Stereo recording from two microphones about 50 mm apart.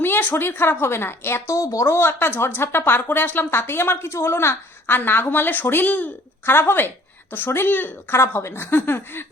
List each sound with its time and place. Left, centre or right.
0.0 s a woman's voice: left
1.5 s a woman's voice: left
2.0 s a woman's voice: left